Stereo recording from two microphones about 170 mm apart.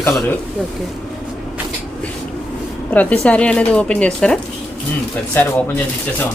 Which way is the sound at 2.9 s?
10° left (ahead or behind).